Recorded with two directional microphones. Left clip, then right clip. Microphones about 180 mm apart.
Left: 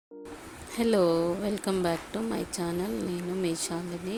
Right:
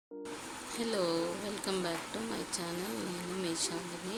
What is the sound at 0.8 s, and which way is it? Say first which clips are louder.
Speech: left 9 dB; 40° left (ahead or behind).